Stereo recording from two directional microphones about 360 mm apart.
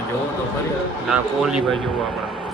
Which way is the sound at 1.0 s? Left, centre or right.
Centre.